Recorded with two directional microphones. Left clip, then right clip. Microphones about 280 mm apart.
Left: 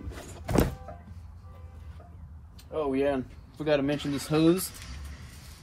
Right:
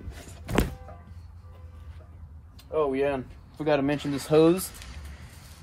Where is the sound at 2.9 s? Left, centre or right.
Right.